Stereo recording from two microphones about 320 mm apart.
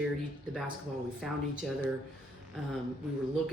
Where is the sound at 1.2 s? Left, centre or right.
Centre.